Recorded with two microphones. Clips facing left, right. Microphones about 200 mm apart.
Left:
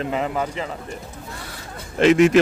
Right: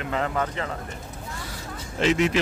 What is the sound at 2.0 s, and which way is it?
Speech, 55° left (ahead or behind).